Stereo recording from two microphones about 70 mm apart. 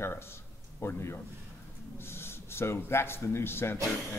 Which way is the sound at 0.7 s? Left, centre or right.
Left.